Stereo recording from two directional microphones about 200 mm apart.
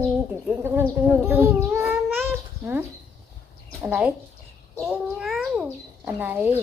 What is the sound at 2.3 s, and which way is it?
Babbling, 10° right (ahead or behind).